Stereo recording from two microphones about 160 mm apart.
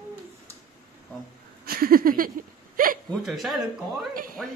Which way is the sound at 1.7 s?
65° right (ahead or behind).